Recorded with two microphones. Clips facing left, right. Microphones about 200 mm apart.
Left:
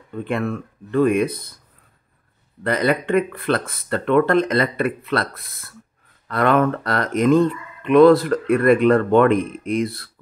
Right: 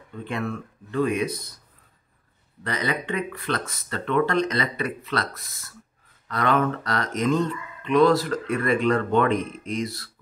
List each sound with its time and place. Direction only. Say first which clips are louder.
0.3 s speech: left 5 dB; 55° left (ahead or behind)
2.6 s speech: left 8 dB; 55° left (ahead or behind)